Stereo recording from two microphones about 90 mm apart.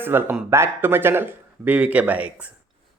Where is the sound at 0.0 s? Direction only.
25° right (ahead or behind).